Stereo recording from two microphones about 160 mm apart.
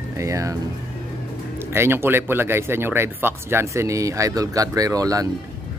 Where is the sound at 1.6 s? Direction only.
15° right (ahead or behind).